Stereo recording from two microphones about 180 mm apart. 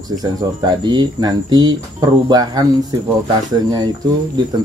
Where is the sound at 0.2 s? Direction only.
25° right (ahead or behind).